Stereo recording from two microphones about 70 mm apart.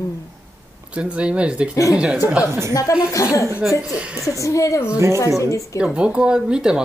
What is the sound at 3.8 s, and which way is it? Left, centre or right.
Speech, centre.